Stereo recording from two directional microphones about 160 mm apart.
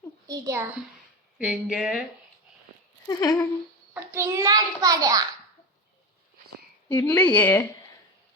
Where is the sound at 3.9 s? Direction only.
15° right (ahead or behind).